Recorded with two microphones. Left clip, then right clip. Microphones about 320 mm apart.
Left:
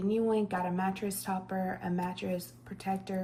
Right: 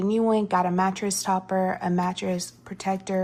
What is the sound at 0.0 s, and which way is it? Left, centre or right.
A woman's voice, centre.